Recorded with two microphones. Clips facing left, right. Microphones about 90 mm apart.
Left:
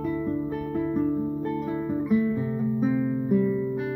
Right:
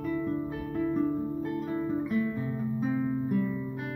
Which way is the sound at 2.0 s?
15° left (ahead or behind).